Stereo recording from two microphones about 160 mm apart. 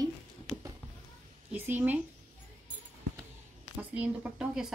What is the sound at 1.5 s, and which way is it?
Speech, 10° right (ahead or behind).